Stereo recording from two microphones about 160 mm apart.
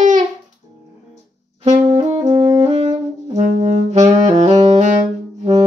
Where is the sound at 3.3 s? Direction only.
45° right (ahead or behind).